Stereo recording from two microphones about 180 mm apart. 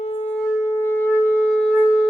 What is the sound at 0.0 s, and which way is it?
Shofar, 35° left (ahead or behind).